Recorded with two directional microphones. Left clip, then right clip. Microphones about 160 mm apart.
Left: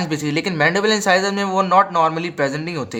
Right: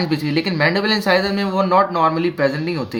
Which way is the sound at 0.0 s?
40° left (ahead or behind).